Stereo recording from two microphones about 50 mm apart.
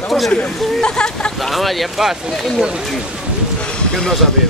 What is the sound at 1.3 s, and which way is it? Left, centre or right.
Speech, centre.